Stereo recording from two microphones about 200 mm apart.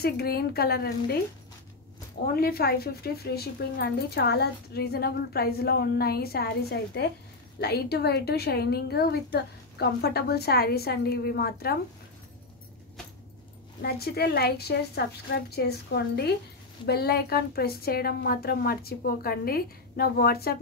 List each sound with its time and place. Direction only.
0.0 s speech: 50° left (ahead or behind)
2.3 s speech: 50° left (ahead or behind)
13.8 s speech: 50° left (ahead or behind)